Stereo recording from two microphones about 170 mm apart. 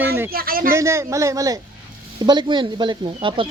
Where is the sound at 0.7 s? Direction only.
15° right (ahead or behind).